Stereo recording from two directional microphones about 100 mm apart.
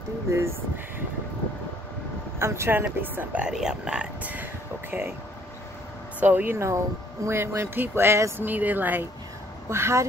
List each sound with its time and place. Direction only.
2.3 s speech: 25° right (ahead or behind)
6.1 s speech: 20° right (ahead or behind)